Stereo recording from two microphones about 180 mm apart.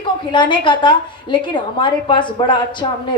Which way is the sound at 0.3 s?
25° left (ahead or behind).